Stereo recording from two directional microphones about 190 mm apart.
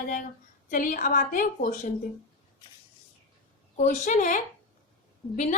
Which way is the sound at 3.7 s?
40° left (ahead or behind).